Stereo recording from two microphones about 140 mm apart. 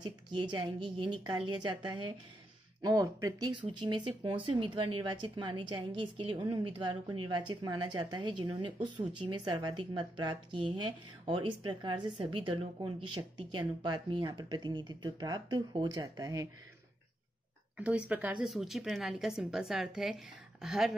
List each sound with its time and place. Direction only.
0.0 s speech: 30° right (ahead or behind)
3.6 s speech: 40° right (ahead or behind)
17.7 s speech: 10° right (ahead or behind)